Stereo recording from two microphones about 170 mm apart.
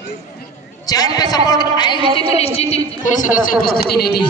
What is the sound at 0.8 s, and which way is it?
A woman's voice, 20° left (ahead or behind).